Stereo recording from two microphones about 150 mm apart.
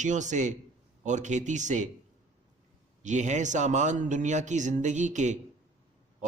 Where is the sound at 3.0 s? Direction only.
55° right (ahead or behind).